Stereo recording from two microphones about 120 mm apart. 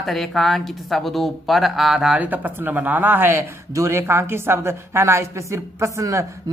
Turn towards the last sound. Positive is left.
turn(degrees=-25)  # may be behind; listen again after turning